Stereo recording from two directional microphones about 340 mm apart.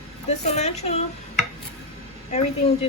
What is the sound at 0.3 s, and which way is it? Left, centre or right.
Speech, centre.